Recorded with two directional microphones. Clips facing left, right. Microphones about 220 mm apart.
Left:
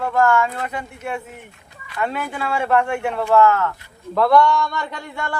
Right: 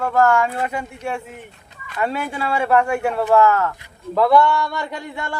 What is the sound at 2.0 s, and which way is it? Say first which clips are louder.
Speech: right 1 dB; 30° right (ahead or behind).